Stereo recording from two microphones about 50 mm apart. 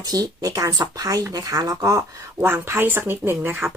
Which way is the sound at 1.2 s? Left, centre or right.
Right.